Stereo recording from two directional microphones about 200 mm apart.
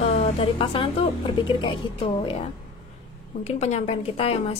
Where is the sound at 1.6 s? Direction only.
25° left (ahead or behind).